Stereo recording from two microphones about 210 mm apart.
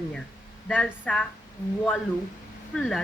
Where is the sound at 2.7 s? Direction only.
Centre (ahead or behind).